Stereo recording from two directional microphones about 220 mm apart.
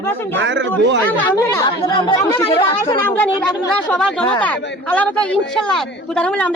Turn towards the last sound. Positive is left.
turn(degrees=5)  # may be behind; listen again after turning